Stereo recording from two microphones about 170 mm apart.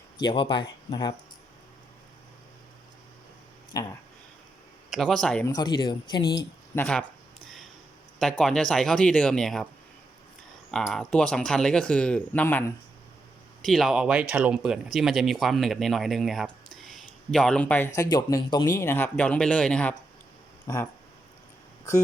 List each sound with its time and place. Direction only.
0.2 s speech: 30° left (ahead or behind)
4.9 s speech: centre (ahead or behind)
5.5 s speech: 25° left (ahead or behind)
6.3 s speech: 10° left (ahead or behind)
8.2 s speech: 5° left (ahead or behind)
10.7 s speech: centre (ahead or behind)
13.6 s speech: centre (ahead or behind)